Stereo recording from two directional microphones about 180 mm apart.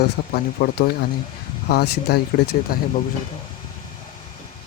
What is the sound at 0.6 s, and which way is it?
Speech, 55° left (ahead or behind).